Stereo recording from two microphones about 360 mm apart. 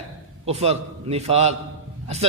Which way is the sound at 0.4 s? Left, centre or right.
Centre.